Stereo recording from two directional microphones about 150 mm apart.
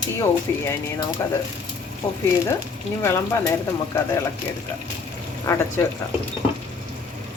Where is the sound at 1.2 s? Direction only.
20° left (ahead or behind).